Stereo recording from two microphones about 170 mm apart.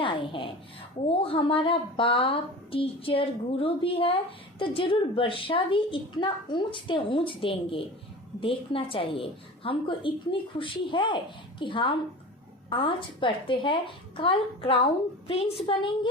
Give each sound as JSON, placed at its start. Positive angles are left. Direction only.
{"t": 0.0, "sound": "a woman's voice", "side_deg": 30}